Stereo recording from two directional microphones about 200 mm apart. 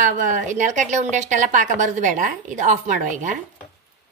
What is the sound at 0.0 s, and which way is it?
A woman's voice, 40° right (ahead or behind).